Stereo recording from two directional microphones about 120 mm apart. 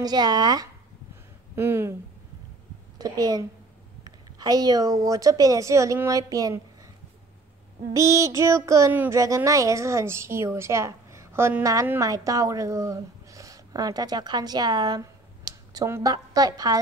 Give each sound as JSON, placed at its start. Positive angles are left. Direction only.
{"t": 0.0, "sound": "a woman's voice", "side_deg": -35}
{"t": 1.5, "sound": "speech", "side_deg": -20}
{"t": 3.0, "sound": "a woman's voice", "side_deg": -30}
{"t": 7.9, "sound": "a woman's voice", "side_deg": -25}